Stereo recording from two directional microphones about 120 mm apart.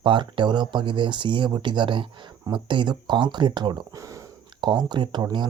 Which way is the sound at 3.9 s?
25° right (ahead or behind).